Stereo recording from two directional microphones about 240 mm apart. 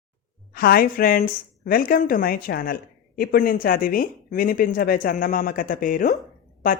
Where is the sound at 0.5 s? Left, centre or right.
Left.